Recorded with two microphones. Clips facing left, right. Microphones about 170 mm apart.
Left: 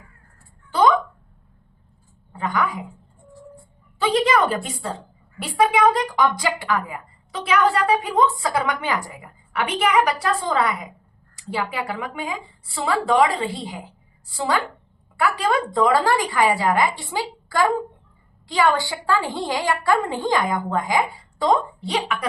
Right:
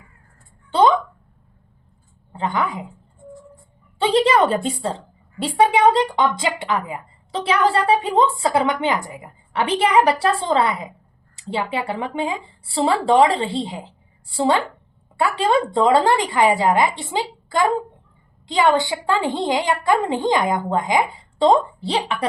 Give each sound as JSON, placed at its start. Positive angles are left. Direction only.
{"t": 0.7, "sound": "a sound", "side_deg": -25}
{"t": 2.3, "sound": "a woman's voice", "side_deg": -25}
{"t": 3.9, "sound": "a woman's voice", "side_deg": -30}